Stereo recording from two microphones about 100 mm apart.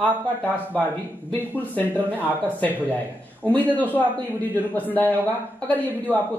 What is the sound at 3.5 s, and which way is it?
Speech, 15° left (ahead or behind).